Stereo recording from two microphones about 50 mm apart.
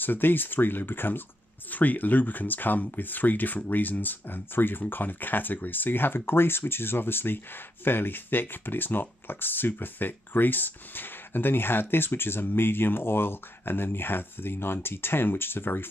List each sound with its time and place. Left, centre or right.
0.0 s speech: left